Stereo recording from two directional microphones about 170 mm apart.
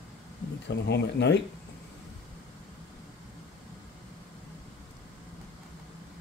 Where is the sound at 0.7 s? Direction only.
90° left.